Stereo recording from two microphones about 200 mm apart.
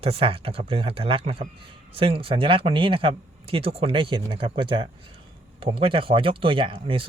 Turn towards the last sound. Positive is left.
turn(degrees=-25)  # may be behind; listen again after turning